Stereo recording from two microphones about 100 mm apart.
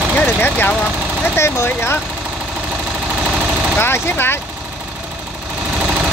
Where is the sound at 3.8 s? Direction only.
20° left (ahead or behind).